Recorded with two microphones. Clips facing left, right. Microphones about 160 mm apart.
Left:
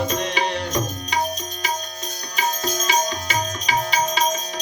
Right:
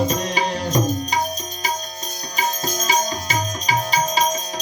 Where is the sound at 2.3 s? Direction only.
40° right (ahead or behind).